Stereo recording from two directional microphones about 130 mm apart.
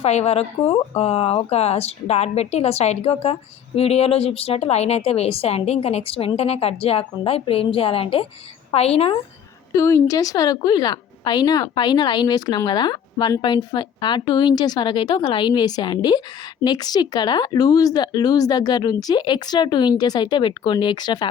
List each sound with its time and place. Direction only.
0.0 s a woman's voice: 55° left (ahead or behind)
9.7 s a woman's voice: 25° left (ahead or behind)